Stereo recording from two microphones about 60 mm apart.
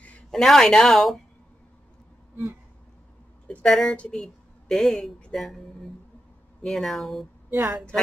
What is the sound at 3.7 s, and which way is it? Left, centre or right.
Speech, centre.